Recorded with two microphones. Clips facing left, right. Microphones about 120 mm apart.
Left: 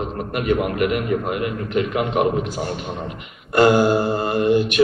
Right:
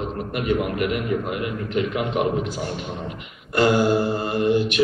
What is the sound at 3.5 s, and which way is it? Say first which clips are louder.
A man's voice: left 3 dB; 55° left (ahead or behind).